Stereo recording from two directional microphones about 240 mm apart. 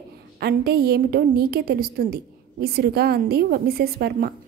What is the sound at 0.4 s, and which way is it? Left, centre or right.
A woman's voice, right.